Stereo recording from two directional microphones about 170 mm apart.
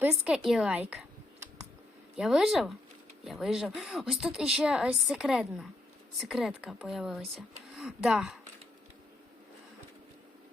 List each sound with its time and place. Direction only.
0.0 s a woman's voice: 10° right (ahead or behind)
2.1 s speech: 5° right (ahead or behind)